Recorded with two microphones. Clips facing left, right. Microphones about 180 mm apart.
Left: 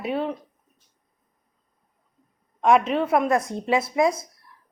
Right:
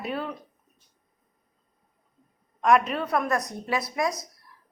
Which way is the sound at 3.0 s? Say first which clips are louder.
Left 5 dB; 25° left (ahead or behind).